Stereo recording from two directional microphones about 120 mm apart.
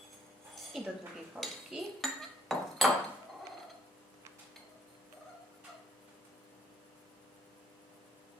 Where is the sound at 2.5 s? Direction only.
Centre (ahead or behind).